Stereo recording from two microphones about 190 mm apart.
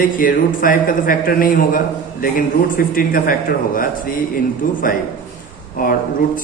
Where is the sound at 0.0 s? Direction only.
45° left (ahead or behind).